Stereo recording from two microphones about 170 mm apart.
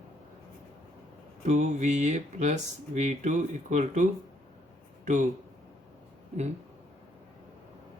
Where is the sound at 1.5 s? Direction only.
45° right (ahead or behind).